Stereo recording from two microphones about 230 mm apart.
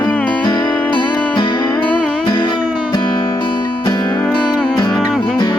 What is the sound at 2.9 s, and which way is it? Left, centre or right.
Music, centre.